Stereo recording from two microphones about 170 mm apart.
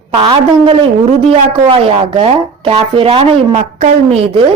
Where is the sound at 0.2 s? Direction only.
25° right (ahead or behind).